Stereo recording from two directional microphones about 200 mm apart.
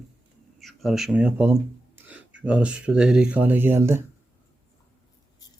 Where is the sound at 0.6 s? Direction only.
Centre (ahead or behind).